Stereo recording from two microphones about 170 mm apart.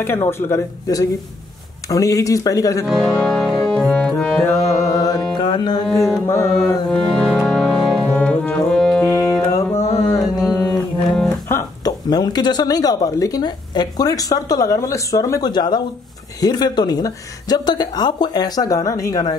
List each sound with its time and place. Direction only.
0.0 s speech: 15° left (ahead or behind)
2.9 s music: centre (ahead or behind)
4.5 s music: 15° left (ahead or behind)
6.0 s speech: 15° left (ahead or behind)
6.9 s brass instrument: 5° left (ahead or behind)
9.1 s music: 20° left (ahead or behind)
9.6 s mantra: 20° left (ahead or behind)
11.4 s speech: 20° left (ahead or behind)